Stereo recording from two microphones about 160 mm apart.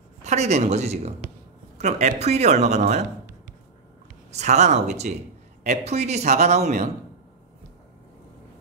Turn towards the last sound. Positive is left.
turn(degrees=-45)  # may be behind; listen again after turning